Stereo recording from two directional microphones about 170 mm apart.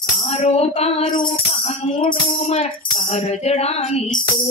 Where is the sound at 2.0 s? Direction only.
30° left (ahead or behind).